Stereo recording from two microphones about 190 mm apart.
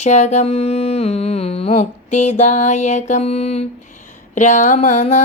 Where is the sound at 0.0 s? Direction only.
35° left (ahead or behind).